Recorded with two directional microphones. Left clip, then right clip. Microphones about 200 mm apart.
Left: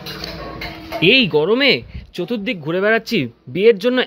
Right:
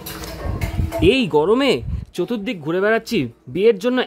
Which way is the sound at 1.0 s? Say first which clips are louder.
Left 2 dB; 15° right (ahead or behind).